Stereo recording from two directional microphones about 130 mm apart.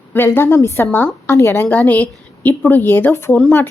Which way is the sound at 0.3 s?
20° left (ahead or behind).